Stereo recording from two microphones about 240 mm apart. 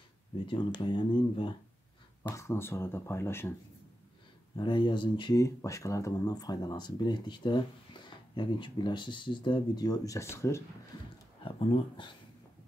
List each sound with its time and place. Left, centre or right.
0.5 s speech: centre
4.6 s speech: centre